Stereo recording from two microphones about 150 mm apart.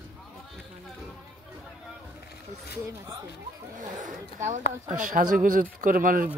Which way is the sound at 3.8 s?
60° right (ahead or behind).